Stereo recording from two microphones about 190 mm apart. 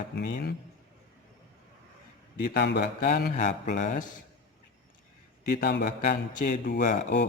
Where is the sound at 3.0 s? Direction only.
45° left (ahead or behind).